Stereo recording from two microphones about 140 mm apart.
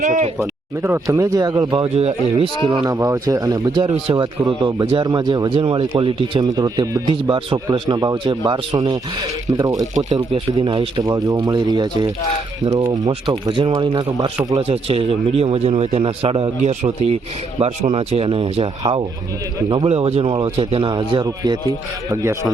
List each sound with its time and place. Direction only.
0.3 s speech: 15° right (ahead or behind); by 2.5 s 45° right (ahead or behind)
2.8 s a man's voice: 25° right (ahead or behind)
9.6 s speech: 25° right (ahead or behind)
10.3 s a man's voice: 40° right (ahead or behind)
14.5 s a man's voice: 45° right (ahead or behind)
16.6 s a man's voice: 50° right (ahead or behind)
19.7 s a man's voice: 45° right (ahead or behind); by 22.5 s 20° right (ahead or behind)